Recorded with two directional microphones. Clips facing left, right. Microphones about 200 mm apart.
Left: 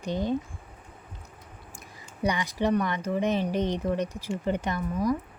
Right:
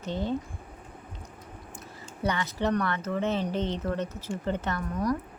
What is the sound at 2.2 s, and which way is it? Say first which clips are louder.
Speech: left 2 dB; 15° left (ahead or behind).